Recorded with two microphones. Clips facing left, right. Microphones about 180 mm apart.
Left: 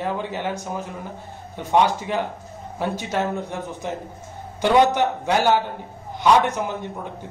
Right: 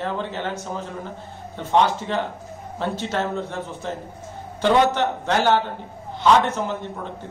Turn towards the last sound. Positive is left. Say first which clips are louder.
# even
turn(degrees=15)  # may be behind; listen again after turning